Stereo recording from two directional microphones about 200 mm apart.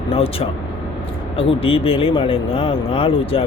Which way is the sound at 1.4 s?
30° left (ahead or behind).